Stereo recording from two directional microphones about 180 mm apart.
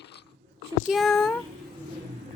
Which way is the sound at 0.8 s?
Centre (ahead or behind).